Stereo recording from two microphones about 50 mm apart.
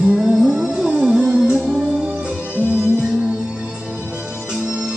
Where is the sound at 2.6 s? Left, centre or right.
Right.